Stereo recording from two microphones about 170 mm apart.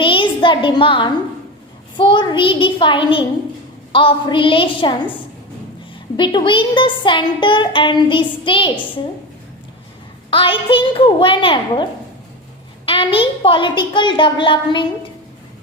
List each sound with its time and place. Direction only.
0.0 s a sound: 30° left (ahead or behind)
2.0 s speech: 30° left (ahead or behind)
6.1 s speech: 30° left (ahead or behind)
10.2 s a woman's voice: 30° left (ahead or behind)